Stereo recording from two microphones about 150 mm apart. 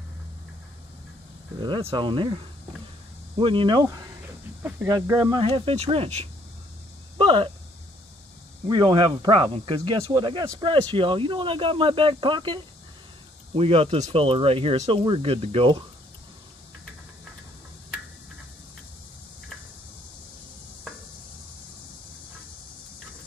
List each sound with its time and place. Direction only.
1.6 s speech: 35° right (ahead or behind)
5.3 s speech: 35° right (ahead or behind)
8.6 s speech: 30° right (ahead or behind)